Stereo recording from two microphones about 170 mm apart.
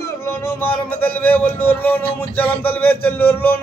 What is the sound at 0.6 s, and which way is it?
Speech, 10° left (ahead or behind).